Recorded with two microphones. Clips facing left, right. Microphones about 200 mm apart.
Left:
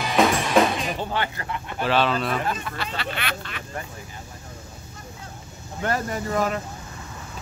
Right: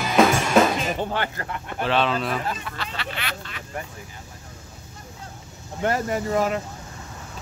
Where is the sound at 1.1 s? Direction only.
50° right (ahead or behind).